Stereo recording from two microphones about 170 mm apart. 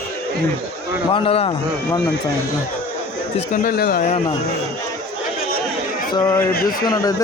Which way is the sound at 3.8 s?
60° left (ahead or behind).